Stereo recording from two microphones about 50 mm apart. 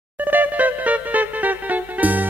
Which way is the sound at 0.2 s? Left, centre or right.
Right.